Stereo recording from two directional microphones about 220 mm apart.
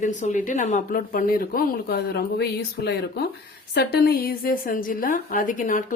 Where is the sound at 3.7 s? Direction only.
45° left (ahead or behind).